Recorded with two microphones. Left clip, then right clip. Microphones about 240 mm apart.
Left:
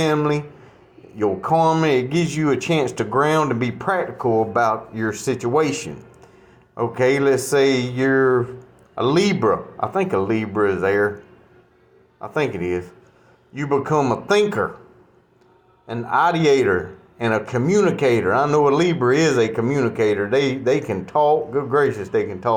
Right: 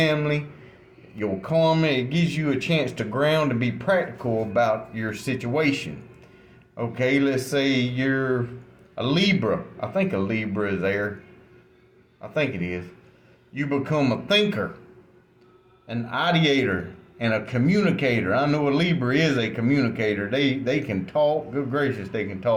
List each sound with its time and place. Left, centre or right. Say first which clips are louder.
1.2 s speech: left 5 dB; centre
12.2 s speech: left 4 dB; centre
15.9 s speech: left 6 dB; centre